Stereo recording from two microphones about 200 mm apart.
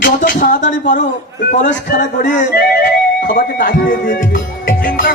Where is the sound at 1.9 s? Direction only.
40° left (ahead or behind).